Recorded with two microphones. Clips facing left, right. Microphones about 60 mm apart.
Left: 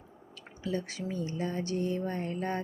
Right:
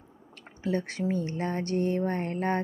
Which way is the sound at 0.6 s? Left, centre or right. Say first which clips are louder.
Right 5 dB; right.